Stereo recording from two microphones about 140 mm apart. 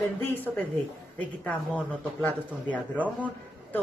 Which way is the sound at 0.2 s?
15° left (ahead or behind).